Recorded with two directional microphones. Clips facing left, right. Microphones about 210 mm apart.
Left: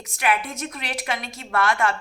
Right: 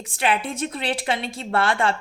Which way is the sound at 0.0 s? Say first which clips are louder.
Right 1 dB; 30° right (ahead or behind).